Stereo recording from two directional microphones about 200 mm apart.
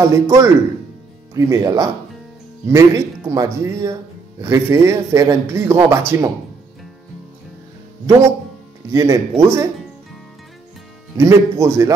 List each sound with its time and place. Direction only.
0.0 s speech: 15° right (ahead or behind)
8.9 s speech: 15° right (ahead or behind)
11.1 s speech: 15° right (ahead or behind)